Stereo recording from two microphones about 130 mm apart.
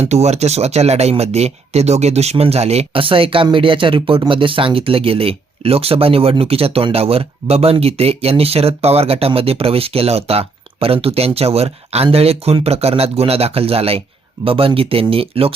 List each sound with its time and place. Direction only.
0.0 s speech: 55° right (ahead or behind)